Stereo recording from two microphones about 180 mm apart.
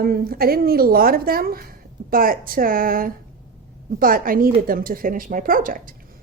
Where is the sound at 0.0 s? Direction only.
55° right (ahead or behind).